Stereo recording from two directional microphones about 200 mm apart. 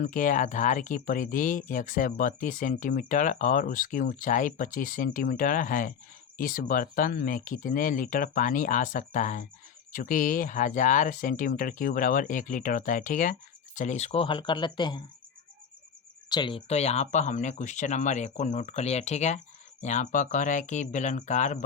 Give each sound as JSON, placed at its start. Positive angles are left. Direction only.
{"t": 0.0, "sound": "speech", "side_deg": 40}
{"t": 16.3, "sound": "speech", "side_deg": 25}